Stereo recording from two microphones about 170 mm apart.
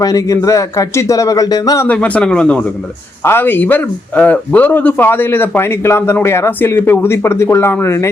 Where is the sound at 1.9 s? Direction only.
10° left (ahead or behind).